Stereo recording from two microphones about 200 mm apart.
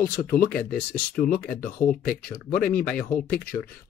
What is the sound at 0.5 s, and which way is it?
Speech, 5° left (ahead or behind).